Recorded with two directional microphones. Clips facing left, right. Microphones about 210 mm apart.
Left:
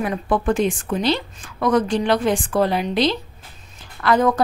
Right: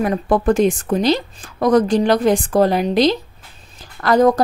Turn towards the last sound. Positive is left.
turn(degrees=-40)  # may be behind; listen again after turning